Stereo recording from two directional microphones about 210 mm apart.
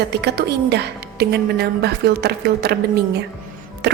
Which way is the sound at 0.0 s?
55° right (ahead or behind).